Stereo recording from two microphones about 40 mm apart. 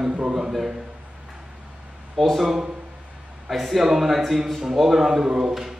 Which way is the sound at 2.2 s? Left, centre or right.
Centre.